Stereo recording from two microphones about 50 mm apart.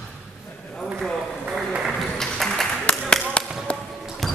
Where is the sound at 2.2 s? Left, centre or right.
Centre.